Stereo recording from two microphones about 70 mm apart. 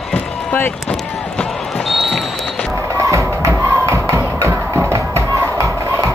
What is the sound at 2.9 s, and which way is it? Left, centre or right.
Crowd, right.